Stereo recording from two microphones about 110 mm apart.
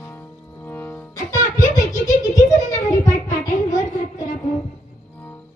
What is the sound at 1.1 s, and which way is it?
Music, 30° left (ahead or behind).